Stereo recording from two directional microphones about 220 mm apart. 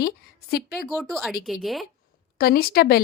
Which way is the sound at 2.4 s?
45° left (ahead or behind).